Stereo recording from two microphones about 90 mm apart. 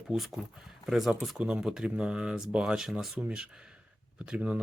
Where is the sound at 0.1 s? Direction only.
Centre (ahead or behind).